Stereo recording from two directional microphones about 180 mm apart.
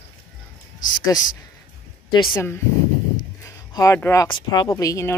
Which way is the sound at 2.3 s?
10° left (ahead or behind).